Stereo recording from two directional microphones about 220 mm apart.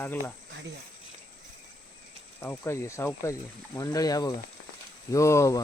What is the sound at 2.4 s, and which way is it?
Speech, 10° left (ahead or behind).